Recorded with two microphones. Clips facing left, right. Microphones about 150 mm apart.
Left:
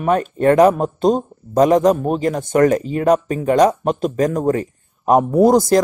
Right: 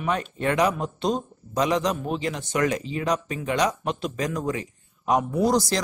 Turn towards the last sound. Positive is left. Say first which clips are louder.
# left 10 dB
turn(degrees=50)  # may be behind; listen again after turning